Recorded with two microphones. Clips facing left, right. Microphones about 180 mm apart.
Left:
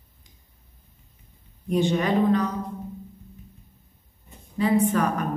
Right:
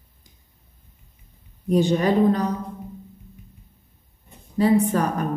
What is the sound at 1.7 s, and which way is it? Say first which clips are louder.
Speech: right 3 dB; 40° right (ahead or behind).